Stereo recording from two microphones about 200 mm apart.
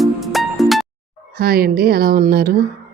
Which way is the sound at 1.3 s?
50° right (ahead or behind).